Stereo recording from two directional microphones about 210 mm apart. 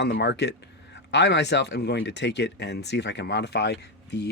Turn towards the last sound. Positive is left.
turn(degrees=55)  # may be behind; listen again after turning